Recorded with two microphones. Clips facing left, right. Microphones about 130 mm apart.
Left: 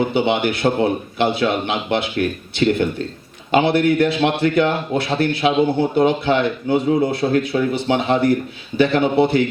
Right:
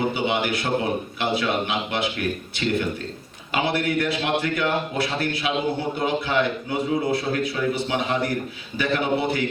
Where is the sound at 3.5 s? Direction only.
25° left (ahead or behind).